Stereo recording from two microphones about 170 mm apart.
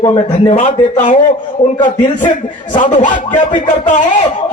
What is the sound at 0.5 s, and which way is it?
Speech, 45° left (ahead or behind).